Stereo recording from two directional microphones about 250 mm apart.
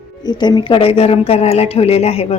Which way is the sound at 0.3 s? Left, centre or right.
Centre.